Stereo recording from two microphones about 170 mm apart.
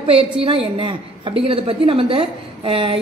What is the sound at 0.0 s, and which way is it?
A woman's voice, 35° right (ahead or behind).